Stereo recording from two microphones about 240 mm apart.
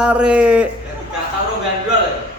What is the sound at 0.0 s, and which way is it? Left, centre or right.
Speech, centre.